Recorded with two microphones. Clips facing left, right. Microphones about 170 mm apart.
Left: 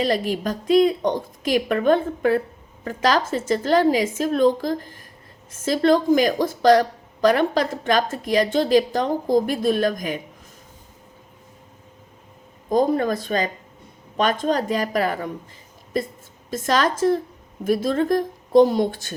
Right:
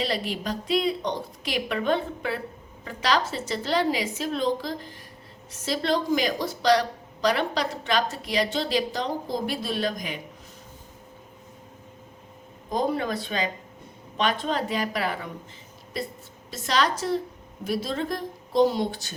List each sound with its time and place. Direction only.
0.0 s a woman's voice: 45° left (ahead or behind)
12.7 s a woman's voice: 45° left (ahead or behind)